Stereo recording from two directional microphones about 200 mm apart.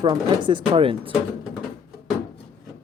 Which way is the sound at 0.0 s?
25° right (ahead or behind).